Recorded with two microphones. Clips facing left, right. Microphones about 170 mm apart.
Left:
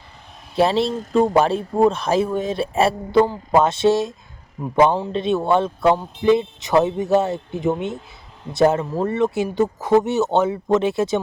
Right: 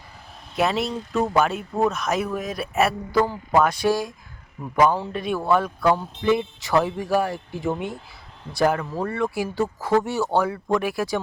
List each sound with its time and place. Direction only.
0.5 s a man's voice: 30° left (ahead or behind)